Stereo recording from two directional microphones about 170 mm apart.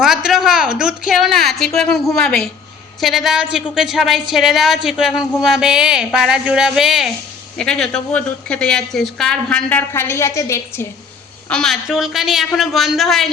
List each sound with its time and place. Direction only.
0.0 s a woman's voice: centre (ahead or behind); by 10.8 s 15° left (ahead or behind)
11.4 s a woman's voice: 5° left (ahead or behind)